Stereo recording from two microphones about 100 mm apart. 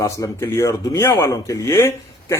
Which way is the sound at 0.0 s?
30° left (ahead or behind).